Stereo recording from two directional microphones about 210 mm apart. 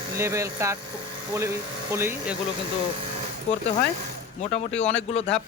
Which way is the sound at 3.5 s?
35° left (ahead or behind).